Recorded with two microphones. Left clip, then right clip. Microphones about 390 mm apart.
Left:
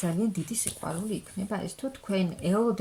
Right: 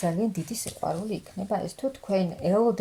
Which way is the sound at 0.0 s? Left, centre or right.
Centre.